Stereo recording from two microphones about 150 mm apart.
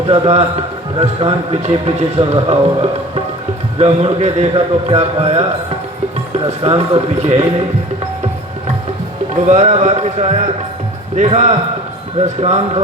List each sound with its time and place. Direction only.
0.1 s a man's voice: 45° right (ahead or behind)
6.7 s a man's voice: 45° right (ahead or behind)
9.5 s a man's voice: 50° right (ahead or behind)